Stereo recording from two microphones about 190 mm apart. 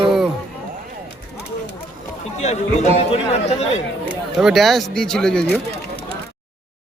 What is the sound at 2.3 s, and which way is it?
Speech, 35° left (ahead or behind).